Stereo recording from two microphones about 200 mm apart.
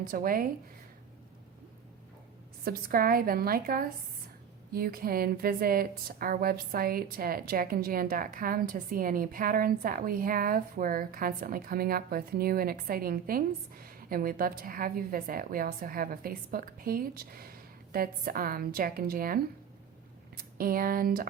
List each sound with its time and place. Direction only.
0.1 s a woman's voice: 45° right (ahead or behind)
2.6 s a woman's voice: 50° right (ahead or behind)